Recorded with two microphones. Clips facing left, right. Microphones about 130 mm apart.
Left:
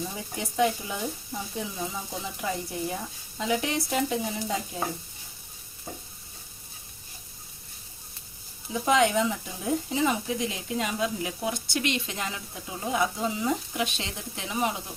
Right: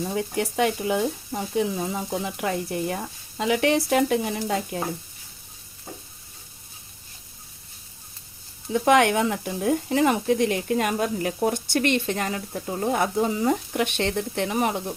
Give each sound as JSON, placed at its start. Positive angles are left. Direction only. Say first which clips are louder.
{"t": 0.3, "sound": "speech", "louder": "even", "side_deg": -70}
{"t": 8.7, "sound": "speech", "louder": "right 4 dB", "side_deg": -65}